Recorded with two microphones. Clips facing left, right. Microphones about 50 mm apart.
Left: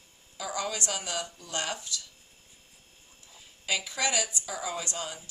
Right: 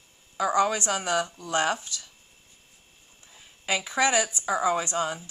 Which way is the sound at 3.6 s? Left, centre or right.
Right.